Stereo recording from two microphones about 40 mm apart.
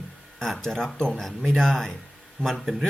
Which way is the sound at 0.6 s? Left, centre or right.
Centre.